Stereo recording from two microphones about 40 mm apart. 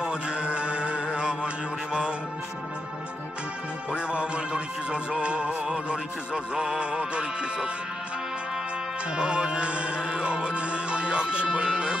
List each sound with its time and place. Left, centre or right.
0.0 s music: right
3.9 s music: right
9.1 s music: right